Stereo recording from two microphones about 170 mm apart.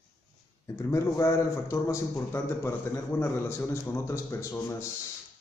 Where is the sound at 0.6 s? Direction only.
15° left (ahead or behind).